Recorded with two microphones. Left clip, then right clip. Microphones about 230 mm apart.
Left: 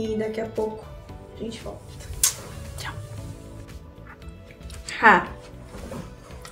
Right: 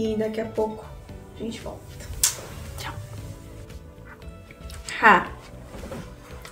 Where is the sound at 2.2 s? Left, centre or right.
Centre.